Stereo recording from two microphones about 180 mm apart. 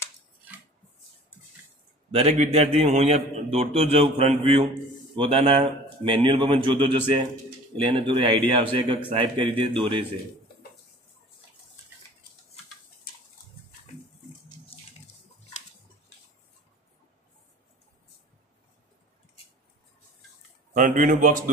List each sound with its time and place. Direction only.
2.0 s a man's voice: 35° right (ahead or behind)
20.7 s speech: 45° right (ahead or behind)